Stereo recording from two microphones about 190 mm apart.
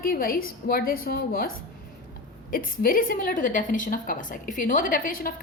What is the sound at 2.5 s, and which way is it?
A woman's voice, 50° left (ahead or behind).